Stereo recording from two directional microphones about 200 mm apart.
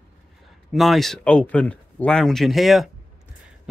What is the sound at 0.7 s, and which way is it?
Speech, centre (ahead or behind).